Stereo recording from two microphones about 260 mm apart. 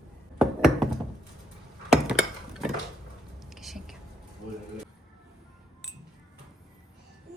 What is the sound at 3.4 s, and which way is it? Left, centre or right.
Whispering, centre.